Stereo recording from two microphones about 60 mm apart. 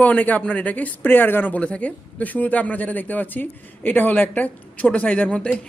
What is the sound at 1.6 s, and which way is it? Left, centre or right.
Speech, left.